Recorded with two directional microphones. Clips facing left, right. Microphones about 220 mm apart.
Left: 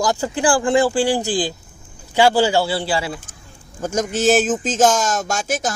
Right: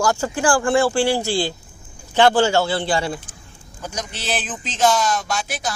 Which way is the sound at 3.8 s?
45° left (ahead or behind).